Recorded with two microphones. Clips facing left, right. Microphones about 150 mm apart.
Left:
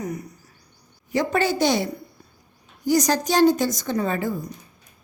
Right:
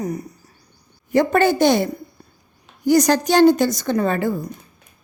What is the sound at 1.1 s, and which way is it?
A woman's voice, 55° right (ahead or behind).